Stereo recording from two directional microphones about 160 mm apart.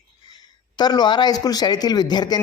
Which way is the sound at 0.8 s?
25° left (ahead or behind).